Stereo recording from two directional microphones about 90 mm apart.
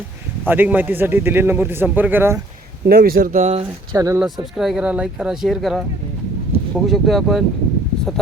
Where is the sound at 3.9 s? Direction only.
40° right (ahead or behind).